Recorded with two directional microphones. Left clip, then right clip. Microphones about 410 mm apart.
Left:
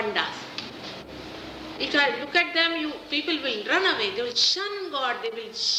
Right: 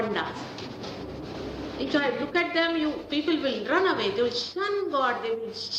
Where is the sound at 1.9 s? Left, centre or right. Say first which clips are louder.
Left 4 dB; centre.